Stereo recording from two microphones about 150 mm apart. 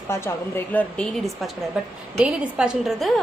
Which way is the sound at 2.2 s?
5° right (ahead or behind).